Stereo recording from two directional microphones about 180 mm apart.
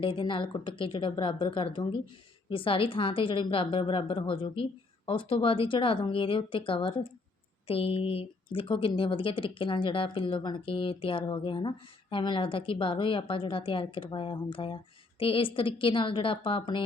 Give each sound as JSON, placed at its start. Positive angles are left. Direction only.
{"t": 0.0, "sound": "a woman's voice", "side_deg": 30}